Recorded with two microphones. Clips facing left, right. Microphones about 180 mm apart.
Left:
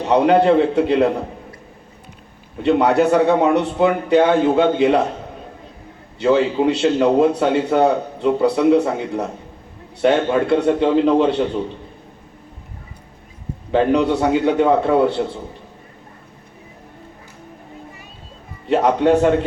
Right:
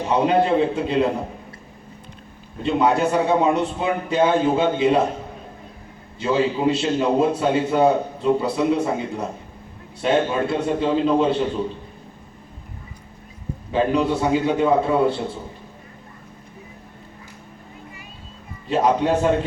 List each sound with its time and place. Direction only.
0.1 s a man's voice: 70° left (ahead or behind)
2.6 s a man's voice: 65° left (ahead or behind)
6.1 s a man's voice: 70° left (ahead or behind)
13.7 s a man's voice: 70° left (ahead or behind)
18.7 s a man's voice: 65° left (ahead or behind)